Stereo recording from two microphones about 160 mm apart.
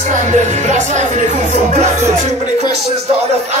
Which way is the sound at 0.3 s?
50° right (ahead or behind).